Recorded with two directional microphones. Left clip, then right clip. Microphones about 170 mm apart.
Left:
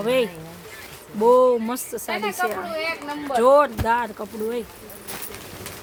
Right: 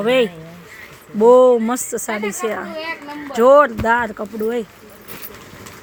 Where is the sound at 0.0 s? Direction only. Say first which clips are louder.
Right 5 dB; 30° right (ahead or behind).